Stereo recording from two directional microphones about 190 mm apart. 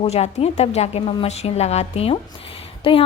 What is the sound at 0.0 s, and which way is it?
A woman's voice, 35° left (ahead or behind).